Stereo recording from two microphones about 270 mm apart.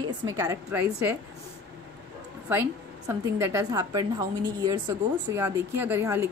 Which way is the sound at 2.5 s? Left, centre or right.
Centre.